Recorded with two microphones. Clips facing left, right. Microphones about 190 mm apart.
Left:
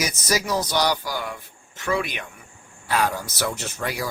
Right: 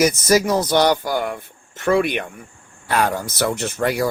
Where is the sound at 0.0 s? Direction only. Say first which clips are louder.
Right 9 dB; 50° right (ahead or behind).